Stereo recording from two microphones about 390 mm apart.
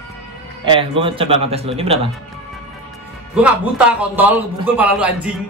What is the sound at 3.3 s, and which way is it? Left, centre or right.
A man's voice, centre.